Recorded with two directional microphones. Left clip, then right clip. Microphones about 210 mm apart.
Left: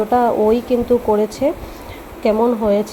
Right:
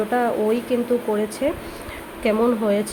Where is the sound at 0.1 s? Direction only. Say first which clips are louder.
Left 8 dB; 15° left (ahead or behind).